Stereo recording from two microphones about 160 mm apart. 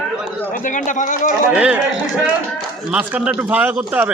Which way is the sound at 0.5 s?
55° left (ahead or behind).